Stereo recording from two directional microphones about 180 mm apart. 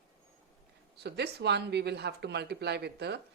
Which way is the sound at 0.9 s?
65° right (ahead or behind).